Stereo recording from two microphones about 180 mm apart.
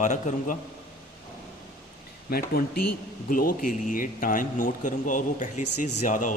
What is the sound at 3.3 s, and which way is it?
Speech, 50° left (ahead or behind).